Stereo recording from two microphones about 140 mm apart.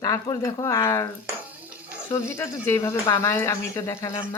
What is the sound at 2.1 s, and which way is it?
Speech, 20° left (ahead or behind).